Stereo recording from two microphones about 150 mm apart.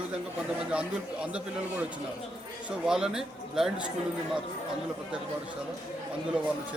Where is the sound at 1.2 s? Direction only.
10° right (ahead or behind).